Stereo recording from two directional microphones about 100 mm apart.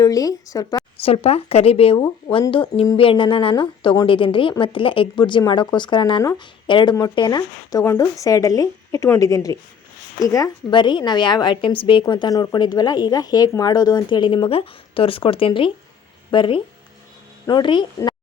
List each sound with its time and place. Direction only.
0.0 s speech: 40° left (ahead or behind)
1.0 s a woman's voice: 85° left
2.5 s speech: 60° left (ahead or behind); by 10.5 s 35° left (ahead or behind)
10.7 s speech: 50° left (ahead or behind)
11.6 s speech: 60° left (ahead or behind)
12.3 s speech: 40° left (ahead or behind)